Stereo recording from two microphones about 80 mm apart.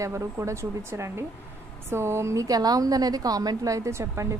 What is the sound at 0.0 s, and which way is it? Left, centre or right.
A woman's voice, right.